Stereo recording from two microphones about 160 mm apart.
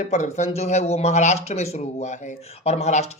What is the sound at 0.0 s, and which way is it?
Speech, 50° left (ahead or behind).